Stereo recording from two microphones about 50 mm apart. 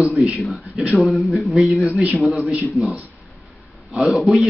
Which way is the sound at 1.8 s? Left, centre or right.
Right.